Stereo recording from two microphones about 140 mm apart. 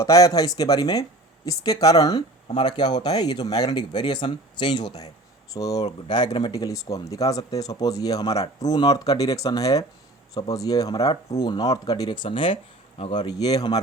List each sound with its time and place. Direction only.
0.0 s speech: 25° left (ahead or behind)